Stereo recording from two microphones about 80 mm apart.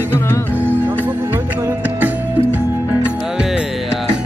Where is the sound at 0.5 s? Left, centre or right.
Right.